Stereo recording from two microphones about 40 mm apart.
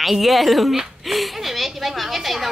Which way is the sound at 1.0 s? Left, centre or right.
Centre.